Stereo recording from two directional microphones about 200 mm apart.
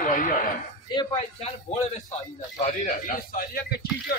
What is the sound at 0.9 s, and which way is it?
Speech, 20° left (ahead or behind).